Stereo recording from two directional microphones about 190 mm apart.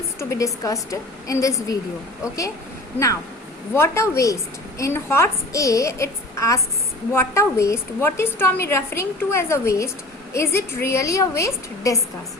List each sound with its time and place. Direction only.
0.2 s a woman's voice: 15° left (ahead or behind)
3.8 s a woman's voice: 15° left (ahead or behind)